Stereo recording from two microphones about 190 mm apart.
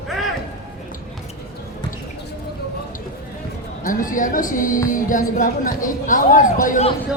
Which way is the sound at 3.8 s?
45° left (ahead or behind).